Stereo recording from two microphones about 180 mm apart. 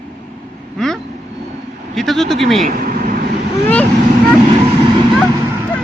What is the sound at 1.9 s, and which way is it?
Speech, centre (ahead or behind).